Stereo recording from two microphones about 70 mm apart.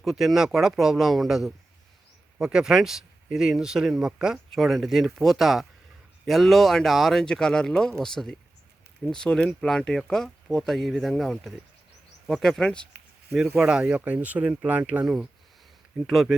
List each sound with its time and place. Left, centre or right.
0.0 s a man's voice: centre
13.5 s speech: centre
14.0 s speech: right
15.0 s speech: centre